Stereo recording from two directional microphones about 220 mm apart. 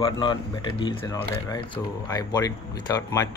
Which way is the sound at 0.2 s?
20° left (ahead or behind).